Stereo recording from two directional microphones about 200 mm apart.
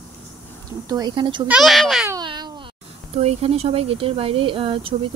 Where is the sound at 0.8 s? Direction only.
20° right (ahead or behind).